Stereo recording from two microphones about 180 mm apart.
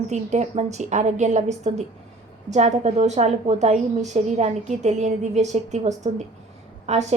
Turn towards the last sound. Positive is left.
turn(degrees=-40)  # may be behind; listen again after turning